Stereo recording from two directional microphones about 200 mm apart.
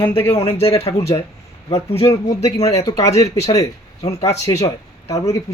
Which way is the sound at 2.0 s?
15° left (ahead or behind).